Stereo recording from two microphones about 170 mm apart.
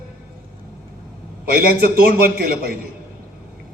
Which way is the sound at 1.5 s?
60° right (ahead or behind).